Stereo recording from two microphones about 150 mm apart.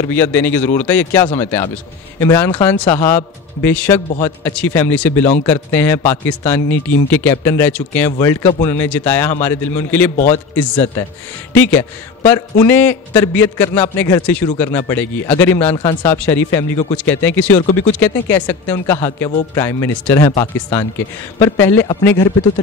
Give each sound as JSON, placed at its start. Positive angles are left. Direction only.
{"t": 0.0, "sound": "a man's voice", "side_deg": 15}
{"t": 10.1, "sound": "a man's voice", "side_deg": 55}
{"t": 10.5, "sound": "a man's voice", "side_deg": 10}
{"t": 12.7, "sound": "a man's voice", "side_deg": 10}
{"t": 17.6, "sound": "speech", "side_deg": 45}
{"t": 18.0, "sound": "a man's voice", "side_deg": 15}